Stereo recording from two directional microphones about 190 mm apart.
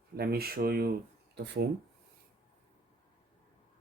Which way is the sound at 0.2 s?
55° right (ahead or behind).